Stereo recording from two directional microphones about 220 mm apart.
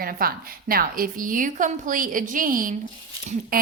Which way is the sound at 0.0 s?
40° right (ahead or behind).